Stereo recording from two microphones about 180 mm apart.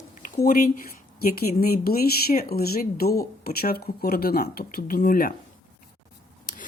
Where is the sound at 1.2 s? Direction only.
60° left (ahead or behind).